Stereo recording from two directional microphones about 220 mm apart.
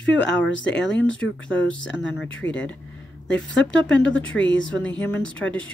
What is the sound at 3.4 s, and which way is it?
Speech, 55° left (ahead or behind).